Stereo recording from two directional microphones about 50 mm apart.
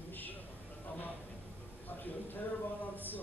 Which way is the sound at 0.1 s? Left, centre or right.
Left.